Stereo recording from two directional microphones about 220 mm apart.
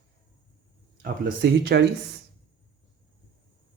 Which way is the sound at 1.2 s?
45° right (ahead or behind).